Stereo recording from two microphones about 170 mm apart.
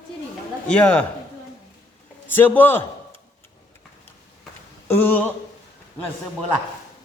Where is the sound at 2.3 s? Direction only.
10° left (ahead or behind).